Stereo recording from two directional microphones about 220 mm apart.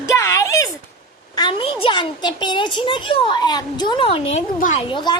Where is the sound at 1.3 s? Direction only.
20° left (ahead or behind).